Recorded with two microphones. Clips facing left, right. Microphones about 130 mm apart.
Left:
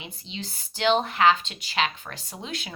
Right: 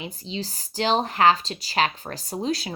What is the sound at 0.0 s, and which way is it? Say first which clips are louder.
Speech: right 6 dB; 40° right (ahead or behind).